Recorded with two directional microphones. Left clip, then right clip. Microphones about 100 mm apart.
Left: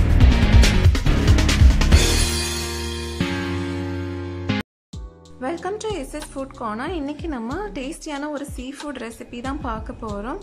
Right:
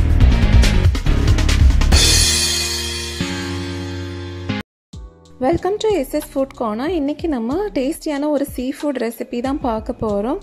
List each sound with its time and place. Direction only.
0.0 s music: centre (ahead or behind)
5.4 s speech: 45° right (ahead or behind)